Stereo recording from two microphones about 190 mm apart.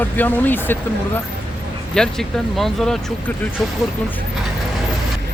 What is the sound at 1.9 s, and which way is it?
Speech, 5° left (ahead or behind).